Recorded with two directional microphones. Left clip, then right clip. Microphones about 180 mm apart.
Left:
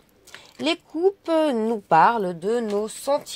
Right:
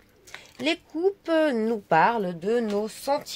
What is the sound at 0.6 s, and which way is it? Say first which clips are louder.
A woman's voice: left 3 dB; 20° left (ahead or behind).